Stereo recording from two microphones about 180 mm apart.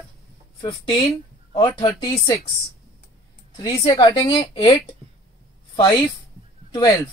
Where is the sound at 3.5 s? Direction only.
25° left (ahead or behind).